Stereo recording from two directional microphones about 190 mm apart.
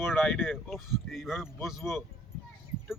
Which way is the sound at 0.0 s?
Centre (ahead or behind).